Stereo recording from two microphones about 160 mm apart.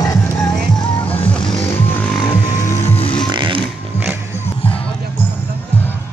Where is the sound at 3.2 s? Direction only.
30° right (ahead or behind).